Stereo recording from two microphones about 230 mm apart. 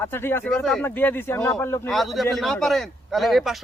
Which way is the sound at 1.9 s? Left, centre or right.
Centre.